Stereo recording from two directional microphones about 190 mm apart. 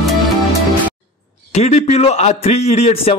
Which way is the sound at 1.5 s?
35° left (ahead or behind).